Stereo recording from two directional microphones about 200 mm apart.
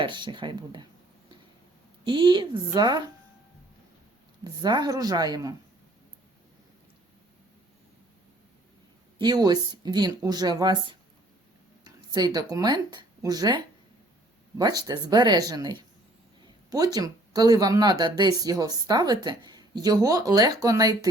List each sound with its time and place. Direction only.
0.0 s a woman's voice: 25° right (ahead or behind)
2.0 s a woman's voice: 25° right (ahead or behind)
4.4 s a woman's voice: 20° right (ahead or behind)
9.1 s a woman's voice: 20° right (ahead or behind)
11.9 s speech: 20° right (ahead or behind)
14.6 s a woman's voice: 20° right (ahead or behind)